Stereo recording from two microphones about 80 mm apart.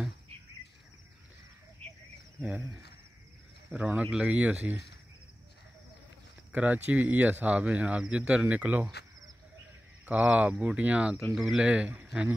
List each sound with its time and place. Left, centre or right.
2.4 s speech: centre
6.5 s speech: centre
10.0 s speech: centre
11.3 s speech: centre
11.6 s speech: centre